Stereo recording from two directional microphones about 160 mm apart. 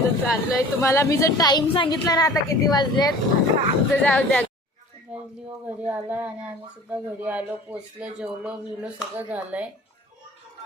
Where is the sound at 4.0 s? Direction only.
10° left (ahead or behind).